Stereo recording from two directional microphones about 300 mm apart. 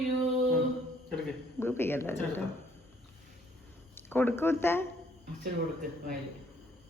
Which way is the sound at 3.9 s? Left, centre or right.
Centre.